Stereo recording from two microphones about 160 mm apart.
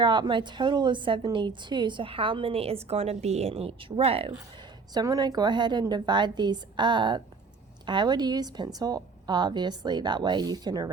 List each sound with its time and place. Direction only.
0.0 s a woman's voice: 30° right (ahead or behind)
4.9 s a woman's voice: 25° right (ahead or behind)